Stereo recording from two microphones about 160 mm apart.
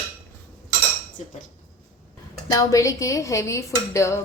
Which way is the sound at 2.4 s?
20° left (ahead or behind).